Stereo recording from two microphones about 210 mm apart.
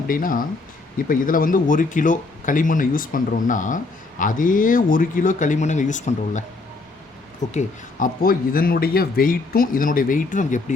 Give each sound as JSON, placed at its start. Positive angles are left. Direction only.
{"t": 0.1, "sound": "speech", "side_deg": 40}
{"t": 7.5, "sound": "speech", "side_deg": 40}